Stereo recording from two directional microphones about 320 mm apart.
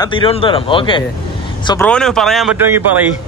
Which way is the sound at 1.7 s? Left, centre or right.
Centre.